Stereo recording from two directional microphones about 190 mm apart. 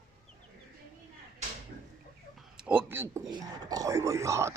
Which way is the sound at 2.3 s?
5° right (ahead or behind).